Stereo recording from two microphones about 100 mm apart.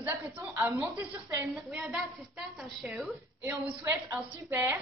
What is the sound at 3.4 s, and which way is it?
A woman's voice, 20° right (ahead or behind).